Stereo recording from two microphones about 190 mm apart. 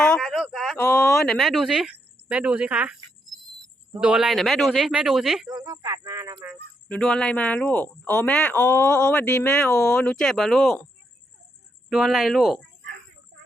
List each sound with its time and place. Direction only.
0.0 s speech: 5° left (ahead or behind)
4.0 s speech: 5° right (ahead or behind)
5.5 s speech: 20° right (ahead or behind)
6.8 s speech: 5° left (ahead or behind)
11.9 s speech: centre (ahead or behind)